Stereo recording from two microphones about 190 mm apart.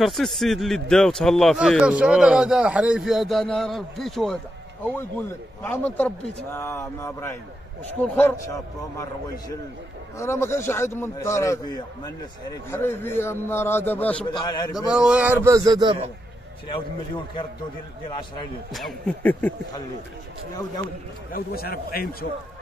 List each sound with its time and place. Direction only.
0.0 s a man's voice: centre (ahead or behind)
10.1 s a man's voice: 15° left (ahead or behind)
14.3 s a man's voice: 20° left (ahead or behind)
14.9 s speech: 5° right (ahead or behind)
15.4 s speech: 20° right (ahead or behind)
18.7 s speech: centre (ahead or behind)
21.3 s a man's voice: 55° left (ahead or behind)